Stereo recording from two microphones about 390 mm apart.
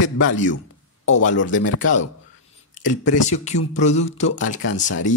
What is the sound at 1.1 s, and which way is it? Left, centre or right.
Speech, centre.